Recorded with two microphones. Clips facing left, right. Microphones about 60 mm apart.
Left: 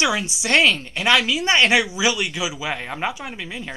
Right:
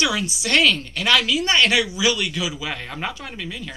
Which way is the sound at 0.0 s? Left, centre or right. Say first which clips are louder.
Left 1 dB; left.